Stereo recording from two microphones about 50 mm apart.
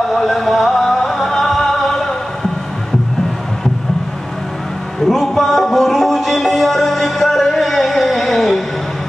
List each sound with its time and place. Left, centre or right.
0.1 s music: centre
5.0 s music: centre